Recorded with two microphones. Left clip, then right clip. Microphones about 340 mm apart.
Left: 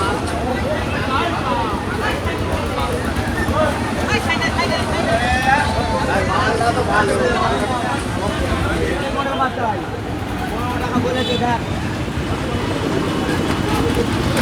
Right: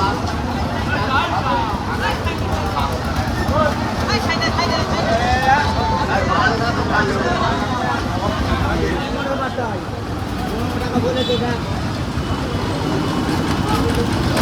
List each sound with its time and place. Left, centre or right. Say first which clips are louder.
4.1 s vehicle: even; right